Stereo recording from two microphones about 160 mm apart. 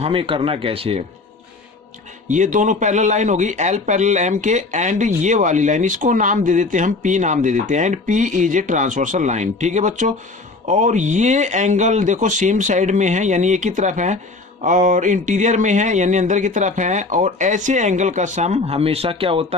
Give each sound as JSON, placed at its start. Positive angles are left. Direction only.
{"t": 0.0, "sound": "speech", "side_deg": -35}
{"t": 2.3, "sound": "a man's voice", "side_deg": -50}